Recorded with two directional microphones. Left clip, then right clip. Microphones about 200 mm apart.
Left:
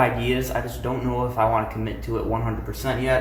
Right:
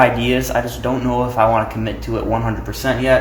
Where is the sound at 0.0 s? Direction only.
30° right (ahead or behind).